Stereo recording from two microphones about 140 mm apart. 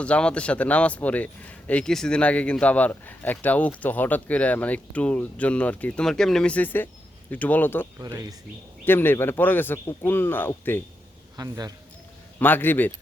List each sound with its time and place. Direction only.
0.0 s speech: 10° left (ahead or behind)
11.3 s a man's voice: 25° right (ahead or behind)
12.4 s speech: 15° left (ahead or behind)